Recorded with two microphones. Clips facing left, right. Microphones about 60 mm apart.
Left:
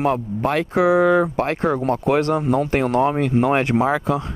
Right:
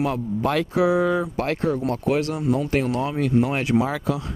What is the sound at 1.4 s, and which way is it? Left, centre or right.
Speech, left.